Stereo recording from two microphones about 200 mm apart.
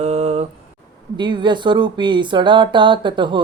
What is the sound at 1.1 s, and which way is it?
Speech, 25° right (ahead or behind).